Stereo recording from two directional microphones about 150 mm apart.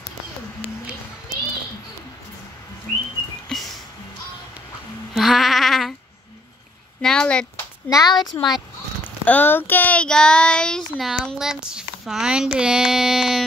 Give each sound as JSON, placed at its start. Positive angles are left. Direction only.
{"t": 3.5, "sound": "music", "side_deg": 5}
{"t": 5.1, "sound": "sheep", "side_deg": 0}
{"t": 7.0, "sound": "a sound", "side_deg": 5}
{"t": 7.9, "sound": "speech", "side_deg": 25}
{"t": 9.0, "sound": "child singing", "side_deg": 10}